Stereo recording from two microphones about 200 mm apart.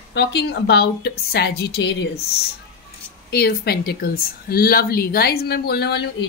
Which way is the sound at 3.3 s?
50° left (ahead or behind).